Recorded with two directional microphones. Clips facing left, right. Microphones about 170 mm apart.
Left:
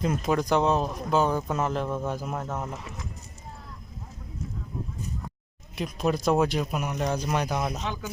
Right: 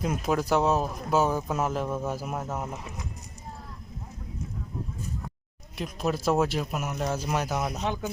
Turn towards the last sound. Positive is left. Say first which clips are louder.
# left 1 dB
turn(degrees=-5)  # may be behind; listen again after turning